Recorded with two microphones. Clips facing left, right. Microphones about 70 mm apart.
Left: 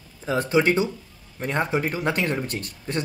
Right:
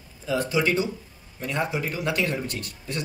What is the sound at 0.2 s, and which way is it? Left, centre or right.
Speech, left.